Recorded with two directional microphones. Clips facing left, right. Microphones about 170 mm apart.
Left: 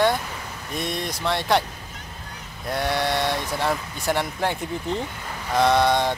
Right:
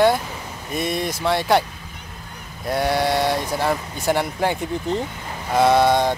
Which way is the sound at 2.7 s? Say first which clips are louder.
Right 4 dB; 5° right (ahead or behind).